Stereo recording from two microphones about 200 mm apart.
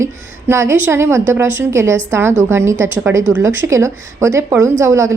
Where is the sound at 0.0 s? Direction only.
15° right (ahead or behind).